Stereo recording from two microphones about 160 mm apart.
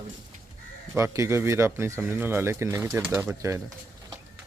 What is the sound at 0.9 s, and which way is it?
Speech, 20° right (ahead or behind).